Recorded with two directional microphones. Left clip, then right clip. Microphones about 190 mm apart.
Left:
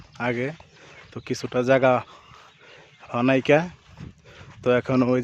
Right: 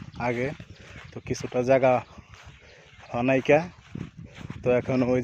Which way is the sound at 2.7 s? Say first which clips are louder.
Left 3 dB; 20° left (ahead or behind).